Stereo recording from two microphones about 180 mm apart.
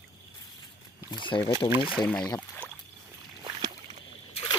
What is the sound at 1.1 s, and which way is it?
Speech, 20° left (ahead or behind).